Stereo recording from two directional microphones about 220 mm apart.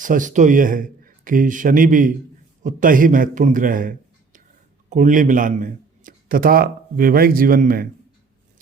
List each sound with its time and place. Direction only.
0.0 s a man's voice: 35° right (ahead or behind)